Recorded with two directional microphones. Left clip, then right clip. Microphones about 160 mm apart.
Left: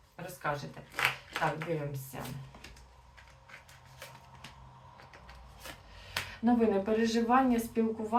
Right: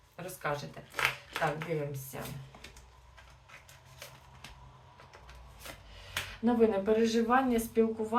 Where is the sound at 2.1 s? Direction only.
15° right (ahead or behind).